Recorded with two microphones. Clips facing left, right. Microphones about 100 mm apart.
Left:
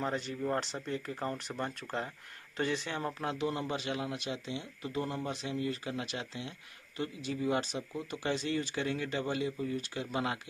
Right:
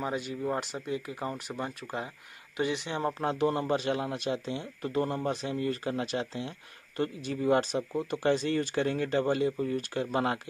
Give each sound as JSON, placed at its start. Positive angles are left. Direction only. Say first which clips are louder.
{"t": 0.0, "sound": "speech", "louder": "right 2 dB", "side_deg": -10}
{"t": 3.1, "sound": "speech", "louder": "right 8 dB", "side_deg": -35}
{"t": 3.3, "sound": "speech", "louder": "right 7 dB", "side_deg": -45}
{"t": 7.0, "sound": "speech", "louder": "right 4 dB", "side_deg": -50}